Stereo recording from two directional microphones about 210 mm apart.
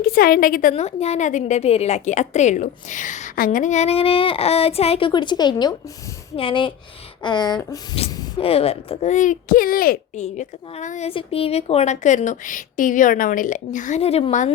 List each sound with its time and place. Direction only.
0.0 s a woman's voice: 45° left (ahead or behind)
0.7 s speech: 30° left (ahead or behind)